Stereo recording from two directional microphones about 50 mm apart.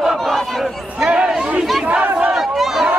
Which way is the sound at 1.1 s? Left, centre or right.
Centre.